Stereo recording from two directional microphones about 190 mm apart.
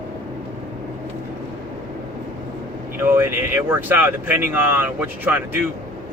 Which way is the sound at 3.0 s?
10° right (ahead or behind).